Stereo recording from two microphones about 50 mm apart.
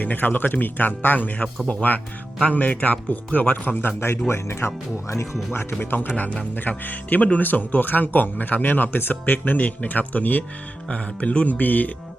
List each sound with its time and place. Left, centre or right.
0.0 s speech: left
4.3 s speech: left
5.5 s speech: left
6.1 s speech: left